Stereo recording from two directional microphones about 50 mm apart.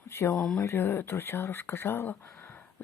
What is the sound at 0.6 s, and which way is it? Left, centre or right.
Speech, left.